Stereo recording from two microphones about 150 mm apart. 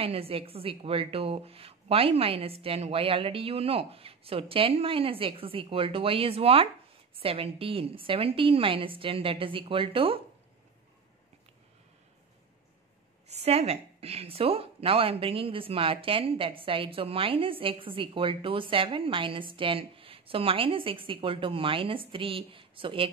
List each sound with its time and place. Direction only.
0.0 s a woman's voice: 40° right (ahead or behind)
13.3 s a woman's voice: 45° right (ahead or behind)